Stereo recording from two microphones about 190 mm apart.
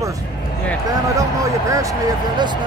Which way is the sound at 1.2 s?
15° right (ahead or behind).